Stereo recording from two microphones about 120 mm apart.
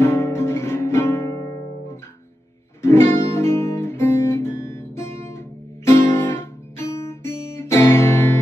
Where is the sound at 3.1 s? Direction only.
20° left (ahead or behind).